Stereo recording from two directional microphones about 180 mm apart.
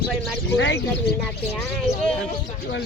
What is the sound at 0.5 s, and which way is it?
Speech, 85° left.